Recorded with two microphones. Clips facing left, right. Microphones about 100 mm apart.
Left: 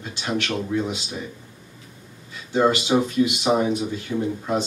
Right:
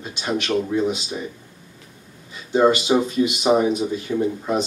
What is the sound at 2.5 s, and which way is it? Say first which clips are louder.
Speech: right 3 dB; 20° right (ahead or behind).